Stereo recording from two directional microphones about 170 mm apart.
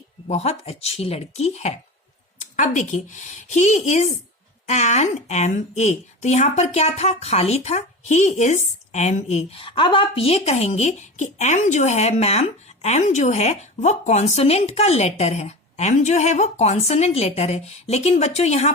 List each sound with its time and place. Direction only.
0.3 s a woman's voice: 40° left (ahead or behind)